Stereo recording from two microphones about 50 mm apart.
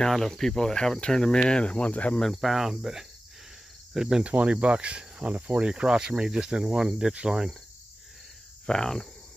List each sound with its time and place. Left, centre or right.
0.0 s cricket: centre
1.0 s speech: centre
2.3 s speech: centre
3.9 s cricket: centre
4.2 s cricket: right
5.3 s speech: right
8.6 s cricket: centre